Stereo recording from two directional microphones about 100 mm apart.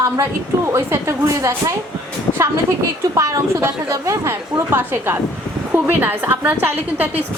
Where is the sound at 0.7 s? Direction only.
25° right (ahead or behind).